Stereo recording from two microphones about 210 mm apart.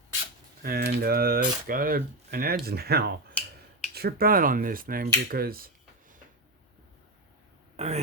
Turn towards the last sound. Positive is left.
turn(degrees=-30)  # may be behind; listen again after turning